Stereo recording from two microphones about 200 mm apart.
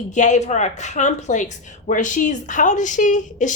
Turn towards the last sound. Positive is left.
turn(degrees=40)  # may be behind; listen again after turning